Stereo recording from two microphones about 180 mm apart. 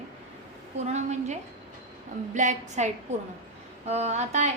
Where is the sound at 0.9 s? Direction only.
40° right (ahead or behind).